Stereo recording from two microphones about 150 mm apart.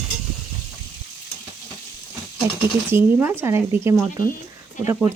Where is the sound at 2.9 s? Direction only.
15° right (ahead or behind).